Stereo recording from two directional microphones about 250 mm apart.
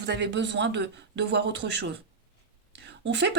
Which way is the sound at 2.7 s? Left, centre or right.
Right.